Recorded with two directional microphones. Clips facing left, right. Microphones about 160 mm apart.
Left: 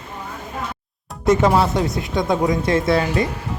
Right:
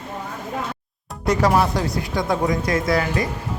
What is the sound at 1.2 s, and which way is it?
Speech, 25° left (ahead or behind).